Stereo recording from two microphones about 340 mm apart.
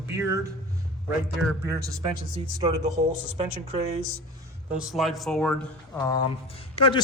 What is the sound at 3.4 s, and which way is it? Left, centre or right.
Speech, centre.